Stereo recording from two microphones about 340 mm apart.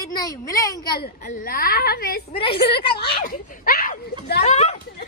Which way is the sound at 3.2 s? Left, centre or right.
Left.